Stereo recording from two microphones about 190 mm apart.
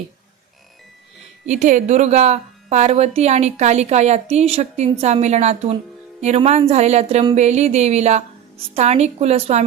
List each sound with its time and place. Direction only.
1.5 s speech: 40° right (ahead or behind)